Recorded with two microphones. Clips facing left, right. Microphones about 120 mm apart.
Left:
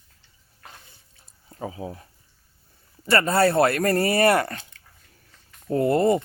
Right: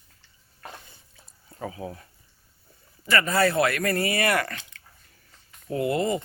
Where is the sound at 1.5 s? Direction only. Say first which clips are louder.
Left 1 dB; 25° left (ahead or behind).